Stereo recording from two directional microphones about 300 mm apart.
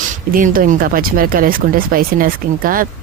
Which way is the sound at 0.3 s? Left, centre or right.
Right.